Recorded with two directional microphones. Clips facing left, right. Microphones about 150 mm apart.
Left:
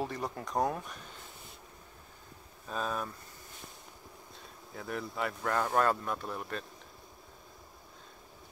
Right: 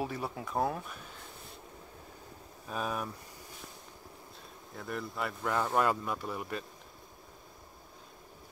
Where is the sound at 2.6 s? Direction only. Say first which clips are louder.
Even; 10° right (ahead or behind).